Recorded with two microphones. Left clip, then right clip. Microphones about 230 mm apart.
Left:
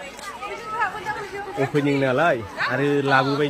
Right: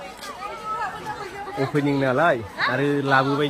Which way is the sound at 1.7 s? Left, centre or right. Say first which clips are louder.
Left 1 dB; centre.